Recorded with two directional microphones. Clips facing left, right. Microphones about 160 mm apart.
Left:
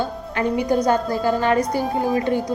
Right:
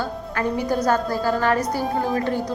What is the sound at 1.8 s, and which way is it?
Speech, centre (ahead or behind).